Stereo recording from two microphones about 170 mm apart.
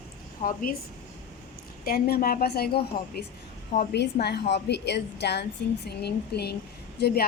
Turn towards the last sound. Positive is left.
turn(degrees=70)  # may be behind; listen again after turning